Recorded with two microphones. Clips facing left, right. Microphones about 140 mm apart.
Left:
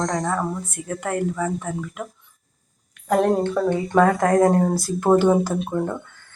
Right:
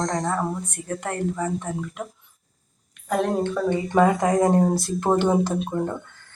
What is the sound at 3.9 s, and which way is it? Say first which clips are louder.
Speech: left 2 dB; 10° right (ahead or behind).